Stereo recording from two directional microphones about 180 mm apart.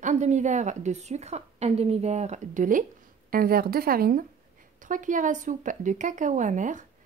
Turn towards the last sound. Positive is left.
turn(degrees=-45)  # may be behind; listen again after turning